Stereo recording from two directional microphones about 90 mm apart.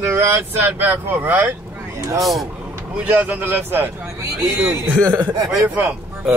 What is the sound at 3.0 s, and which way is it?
Speech, 20° right (ahead or behind).